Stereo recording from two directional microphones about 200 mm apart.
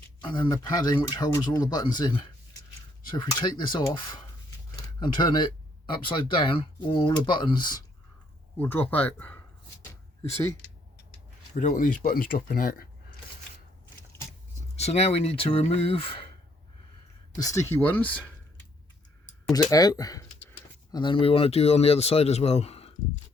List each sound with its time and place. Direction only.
0.2 s speech: 25° left (ahead or behind)
8.5 s speech: 10° left (ahead or behind)
11.5 s speech: 40° left (ahead or behind)
14.8 s speech: 30° left (ahead or behind)
17.3 s speech: 15° left (ahead or behind)
19.5 s speech: 20° left (ahead or behind)